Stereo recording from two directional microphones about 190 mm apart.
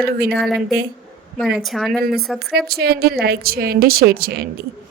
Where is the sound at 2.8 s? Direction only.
55° right (ahead or behind).